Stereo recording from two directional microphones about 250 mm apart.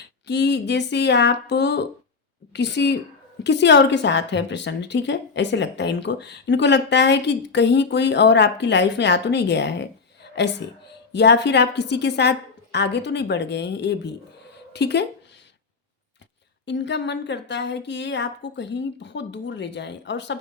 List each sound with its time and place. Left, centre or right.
0.3 s a woman's voice: left
16.6 s a woman's voice: left